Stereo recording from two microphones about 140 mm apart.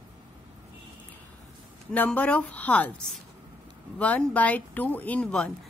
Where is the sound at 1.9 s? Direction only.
10° left (ahead or behind).